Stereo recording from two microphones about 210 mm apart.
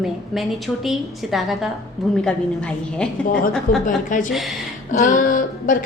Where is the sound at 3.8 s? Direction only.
40° left (ahead or behind).